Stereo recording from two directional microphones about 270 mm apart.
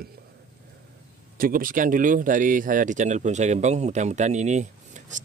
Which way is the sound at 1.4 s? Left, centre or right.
Right.